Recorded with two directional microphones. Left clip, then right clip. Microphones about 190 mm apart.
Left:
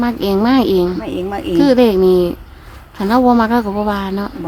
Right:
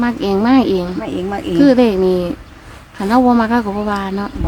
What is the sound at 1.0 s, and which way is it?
Speech, 5° left (ahead or behind).